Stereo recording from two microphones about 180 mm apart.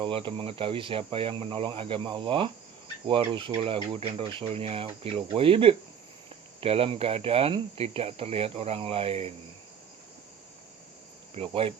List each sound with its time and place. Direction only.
0.0 s speech: 30° right (ahead or behind)
11.3 s speech: 30° right (ahead or behind)